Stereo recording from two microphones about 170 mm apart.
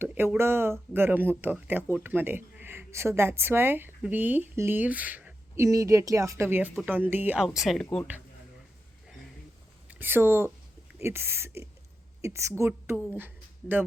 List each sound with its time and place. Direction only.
0.0 s speech: 10° right (ahead or behind)
9.9 s speech: 10° right (ahead or behind)